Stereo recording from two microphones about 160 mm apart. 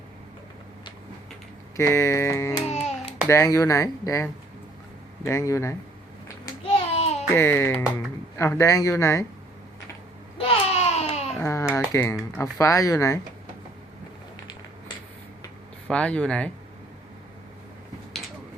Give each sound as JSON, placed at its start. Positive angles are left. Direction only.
{"t": 1.7, "sound": "speech", "side_deg": 15}
{"t": 2.6, "sound": "a sound", "side_deg": 45}
{"t": 3.2, "sound": "speech", "side_deg": 20}
{"t": 7.3, "sound": "speech", "side_deg": 15}
{"t": 10.3, "sound": "baby cry", "side_deg": 40}
{"t": 11.3, "sound": "a sound", "side_deg": 15}
{"t": 12.4, "sound": "speech", "side_deg": 20}
{"t": 15.9, "sound": "speech", "side_deg": 5}